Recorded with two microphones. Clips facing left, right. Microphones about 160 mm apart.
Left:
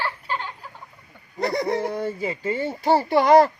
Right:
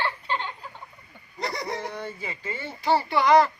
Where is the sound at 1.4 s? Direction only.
55° left (ahead or behind).